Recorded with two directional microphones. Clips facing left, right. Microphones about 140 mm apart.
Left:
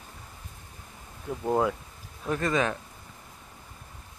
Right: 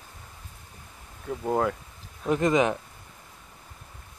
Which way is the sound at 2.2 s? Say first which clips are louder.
Right 4 dB; 20° right (ahead or behind).